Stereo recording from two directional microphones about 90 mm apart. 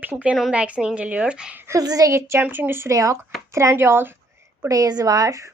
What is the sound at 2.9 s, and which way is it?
A woman's voice, 35° right (ahead or behind).